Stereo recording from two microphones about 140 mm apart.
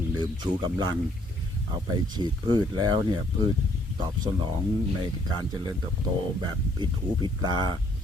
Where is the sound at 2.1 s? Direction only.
30° right (ahead or behind).